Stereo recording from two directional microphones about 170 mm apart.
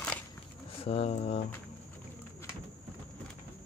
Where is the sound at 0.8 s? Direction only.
35° left (ahead or behind).